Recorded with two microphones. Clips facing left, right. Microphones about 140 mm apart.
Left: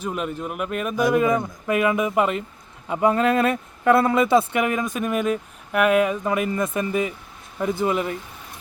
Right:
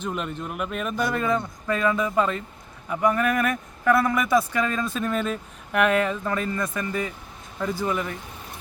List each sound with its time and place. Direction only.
0.0 s speech: 5° left (ahead or behind)
2.8 s speech: 30° left (ahead or behind)